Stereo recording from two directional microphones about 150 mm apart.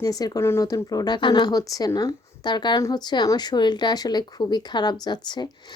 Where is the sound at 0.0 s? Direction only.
25° left (ahead or behind).